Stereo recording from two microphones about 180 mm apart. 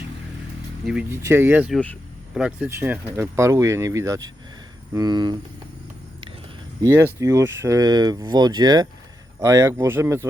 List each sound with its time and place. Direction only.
1.1 s speech: 15° right (ahead or behind)
1.7 s vehicle: 5° left (ahead or behind)
2.4 s speech: 10° right (ahead or behind)
6.8 s speech: 15° right (ahead or behind)